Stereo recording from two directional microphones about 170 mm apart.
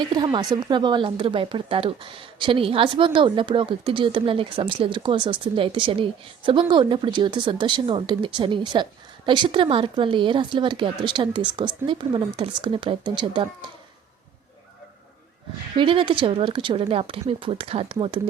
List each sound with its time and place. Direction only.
0.1 s a woman's voice: 25° right (ahead or behind)
15.7 s speech: 30° right (ahead or behind)